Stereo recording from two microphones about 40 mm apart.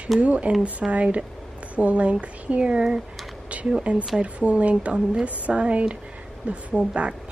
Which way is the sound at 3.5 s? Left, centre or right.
Right.